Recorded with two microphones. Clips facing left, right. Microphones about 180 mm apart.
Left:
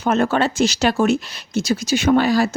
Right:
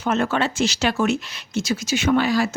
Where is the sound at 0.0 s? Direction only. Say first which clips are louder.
Left 4 dB; 35° left (ahead or behind).